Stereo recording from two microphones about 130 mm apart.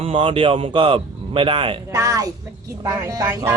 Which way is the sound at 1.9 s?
25° right (ahead or behind).